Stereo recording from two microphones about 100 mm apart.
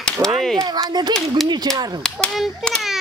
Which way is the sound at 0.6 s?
45° right (ahead or behind).